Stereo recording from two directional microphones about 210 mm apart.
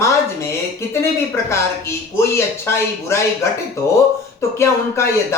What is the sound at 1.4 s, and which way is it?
Speech, 15° left (ahead or behind).